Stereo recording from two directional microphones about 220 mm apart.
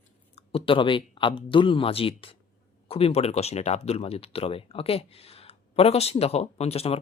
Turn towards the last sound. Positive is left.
turn(degrees=25)  # may be behind; listen again after turning